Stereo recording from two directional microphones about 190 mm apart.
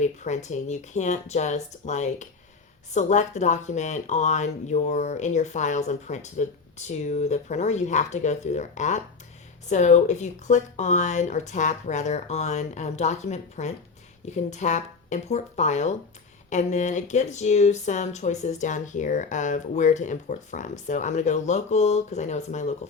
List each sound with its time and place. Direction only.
0.0 s speech: 40° left (ahead or behind)